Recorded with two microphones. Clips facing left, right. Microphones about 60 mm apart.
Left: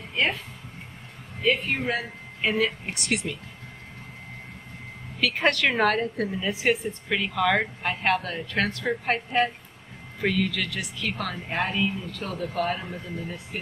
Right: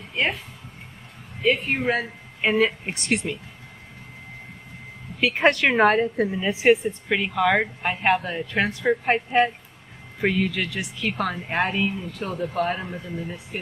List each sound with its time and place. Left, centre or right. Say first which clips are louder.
0.1 s a sound: right 1 dB; centre
1.7 s speech: right 4 dB; right
5.2 s a woman's voice: right 4 dB; right